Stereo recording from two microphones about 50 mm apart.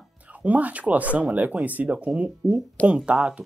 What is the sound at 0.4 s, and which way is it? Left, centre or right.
Speech, right.